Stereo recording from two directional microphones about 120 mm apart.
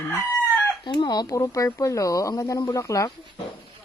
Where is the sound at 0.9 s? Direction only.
35° left (ahead or behind).